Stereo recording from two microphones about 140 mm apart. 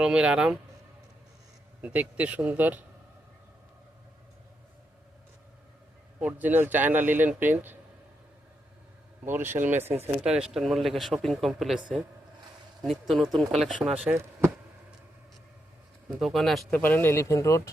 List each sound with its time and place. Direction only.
0.0 s speech: 5° right (ahead or behind)
1.8 s speech: 10° right (ahead or behind)
6.1 s speech: 10° right (ahead or behind)
9.2 s speech: 15° right (ahead or behind)
16.0 s speech: 5° right (ahead or behind)
16.8 s speech: 15° left (ahead or behind)